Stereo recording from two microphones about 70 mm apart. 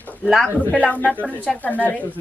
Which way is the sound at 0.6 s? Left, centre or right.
Left.